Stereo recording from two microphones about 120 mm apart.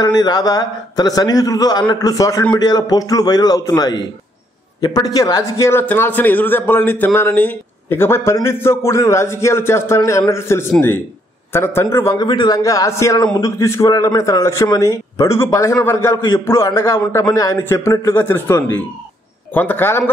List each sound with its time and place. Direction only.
0.0 s a man's voice: 35° left (ahead or behind)
12.2 s a man's voice: 35° left (ahead or behind); by 20.1 s 20° left (ahead or behind)